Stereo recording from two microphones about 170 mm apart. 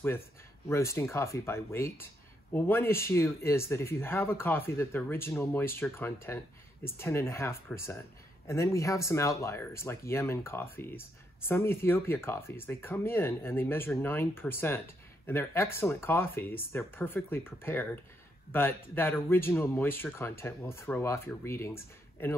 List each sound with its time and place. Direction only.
0.7 s speech: 15° left (ahead or behind)